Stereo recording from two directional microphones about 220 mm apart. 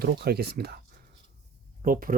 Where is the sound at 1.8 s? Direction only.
40° right (ahead or behind).